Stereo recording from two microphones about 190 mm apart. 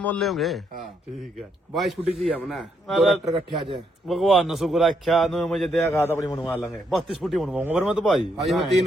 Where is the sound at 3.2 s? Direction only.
25° right (ahead or behind).